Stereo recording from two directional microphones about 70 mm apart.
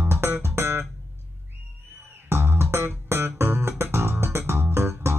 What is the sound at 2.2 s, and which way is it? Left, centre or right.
Music, right.